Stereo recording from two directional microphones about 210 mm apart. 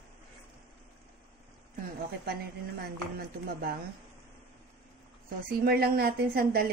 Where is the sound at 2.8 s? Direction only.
45° right (ahead or behind).